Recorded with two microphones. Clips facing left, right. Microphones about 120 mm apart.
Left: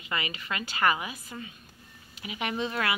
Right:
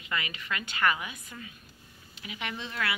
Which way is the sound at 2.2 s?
20° left (ahead or behind).